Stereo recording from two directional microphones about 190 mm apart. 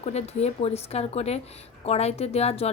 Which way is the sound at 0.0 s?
35° left (ahead or behind).